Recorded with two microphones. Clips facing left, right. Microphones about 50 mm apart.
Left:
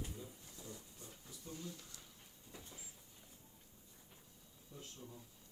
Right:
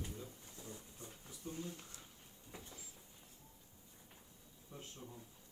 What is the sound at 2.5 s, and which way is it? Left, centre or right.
Cupboard open or close, right.